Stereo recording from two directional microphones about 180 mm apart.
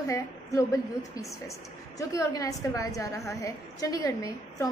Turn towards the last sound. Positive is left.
turn(degrees=20)  # may be behind; listen again after turning